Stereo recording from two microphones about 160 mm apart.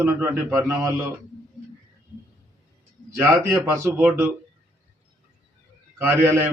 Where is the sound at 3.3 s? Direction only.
15° right (ahead or behind).